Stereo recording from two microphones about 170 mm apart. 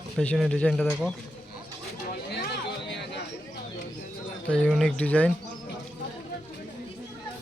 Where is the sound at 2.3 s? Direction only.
80° left.